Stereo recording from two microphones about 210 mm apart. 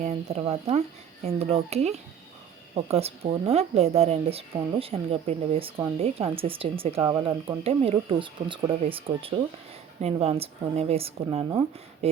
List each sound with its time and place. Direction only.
0.0 s a child's voice: 30° right (ahead or behind)